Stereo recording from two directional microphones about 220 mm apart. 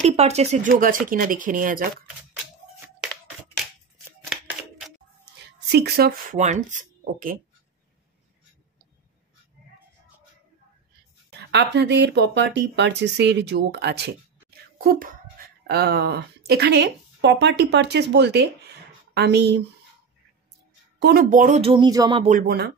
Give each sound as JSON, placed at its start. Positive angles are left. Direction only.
{"t": 0.0, "sound": "speech", "side_deg": -30}
{"t": 4.3, "sound": "a sound", "side_deg": 0}
{"t": 5.2, "sound": "speech", "side_deg": -50}
{"t": 11.2, "sound": "speech", "side_deg": -50}
{"t": 21.0, "sound": "speech", "side_deg": -45}
{"t": 22.3, "sound": "speech", "side_deg": -45}